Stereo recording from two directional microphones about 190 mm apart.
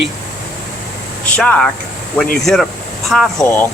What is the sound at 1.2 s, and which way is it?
Speech, 5° left (ahead or behind).